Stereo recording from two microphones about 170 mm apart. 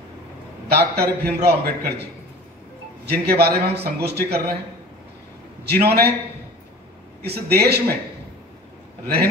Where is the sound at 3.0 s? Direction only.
70° right (ahead or behind).